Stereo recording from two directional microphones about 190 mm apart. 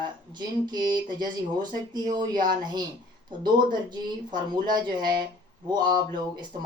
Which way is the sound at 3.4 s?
20° right (ahead or behind).